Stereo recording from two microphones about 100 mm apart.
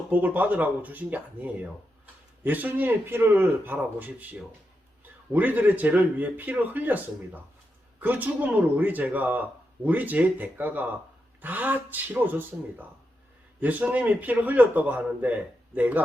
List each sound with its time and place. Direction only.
0.1 s a man's voice: 15° right (ahead or behind)
8.0 s a man's voice: 15° right (ahead or behind)
13.6 s a man's voice: 15° right (ahead or behind)